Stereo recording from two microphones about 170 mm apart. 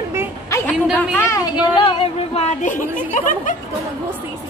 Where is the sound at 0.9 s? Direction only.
10° left (ahead or behind).